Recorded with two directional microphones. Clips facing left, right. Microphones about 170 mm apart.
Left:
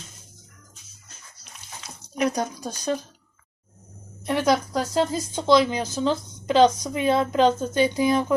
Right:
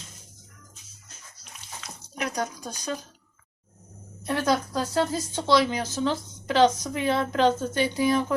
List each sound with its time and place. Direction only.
2.1 s speech: 25° left (ahead or behind)
4.3 s speech: 15° left (ahead or behind)